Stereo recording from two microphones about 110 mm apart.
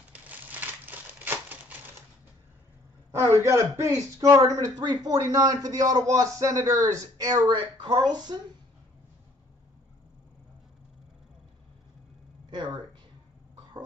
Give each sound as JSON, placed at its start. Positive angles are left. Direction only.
{"t": 0.1, "sound": "crumpling", "side_deg": -15}
{"t": 3.4, "sound": "speech", "side_deg": -25}
{"t": 12.4, "sound": "a sound", "side_deg": -40}